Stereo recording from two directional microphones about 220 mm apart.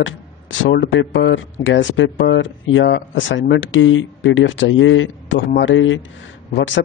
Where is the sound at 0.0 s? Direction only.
60° left (ahead or behind).